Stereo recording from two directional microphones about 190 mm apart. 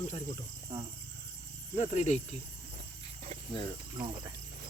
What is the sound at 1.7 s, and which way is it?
Speech, 35° left (ahead or behind).